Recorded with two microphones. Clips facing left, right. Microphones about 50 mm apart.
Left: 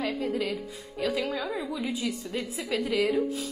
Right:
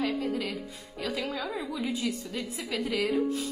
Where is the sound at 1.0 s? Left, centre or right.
Centre.